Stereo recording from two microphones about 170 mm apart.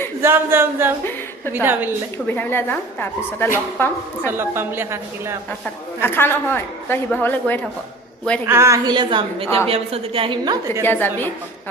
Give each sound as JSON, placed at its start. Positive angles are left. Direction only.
{"t": 0.2, "sound": "a woman's voice", "side_deg": -15}
{"t": 2.1, "sound": "a man's voice", "side_deg": 10}
{"t": 4.3, "sound": "a woman's voice", "side_deg": -15}
{"t": 6.0, "sound": "a man's voice", "side_deg": 15}
{"t": 8.4, "sound": "a woman's voice", "side_deg": -15}
{"t": 10.8, "sound": "a man's voice", "side_deg": 10}